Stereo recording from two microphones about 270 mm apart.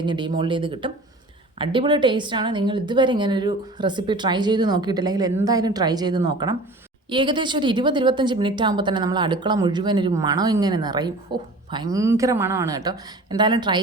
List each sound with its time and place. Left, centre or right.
0.0 s a woman's voice: centre